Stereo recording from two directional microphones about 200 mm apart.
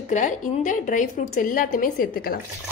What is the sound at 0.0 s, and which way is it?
A woman's voice, 40° left (ahead or behind).